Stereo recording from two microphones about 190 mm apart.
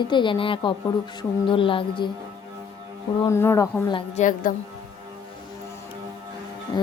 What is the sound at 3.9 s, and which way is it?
Speech, 30° left (ahead or behind).